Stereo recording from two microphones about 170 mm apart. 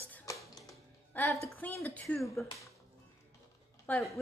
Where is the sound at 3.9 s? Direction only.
10° left (ahead or behind).